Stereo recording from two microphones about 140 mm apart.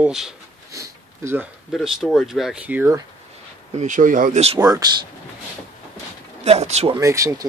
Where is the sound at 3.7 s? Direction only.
65° right (ahead or behind).